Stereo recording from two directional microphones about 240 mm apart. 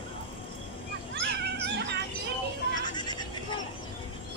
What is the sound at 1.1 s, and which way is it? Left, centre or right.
Cat, right.